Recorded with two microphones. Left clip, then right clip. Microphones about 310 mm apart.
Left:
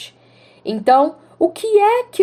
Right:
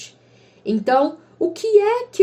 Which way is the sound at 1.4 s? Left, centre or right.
Left.